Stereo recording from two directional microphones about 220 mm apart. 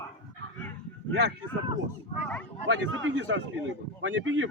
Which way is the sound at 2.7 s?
60° right (ahead or behind).